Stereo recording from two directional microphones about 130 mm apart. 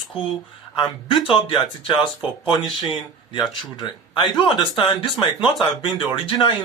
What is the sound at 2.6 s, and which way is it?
Speech, centre (ahead or behind).